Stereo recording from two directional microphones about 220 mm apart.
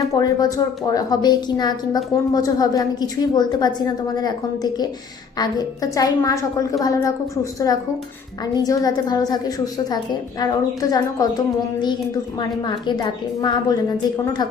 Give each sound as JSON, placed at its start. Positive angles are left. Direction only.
{"t": 0.1, "sound": "a woman's voice", "side_deg": 15}
{"t": 8.5, "sound": "a woman's voice", "side_deg": 15}